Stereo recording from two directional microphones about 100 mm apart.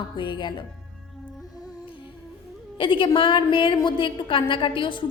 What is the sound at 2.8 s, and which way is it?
A woman's voice, 55° left (ahead or behind).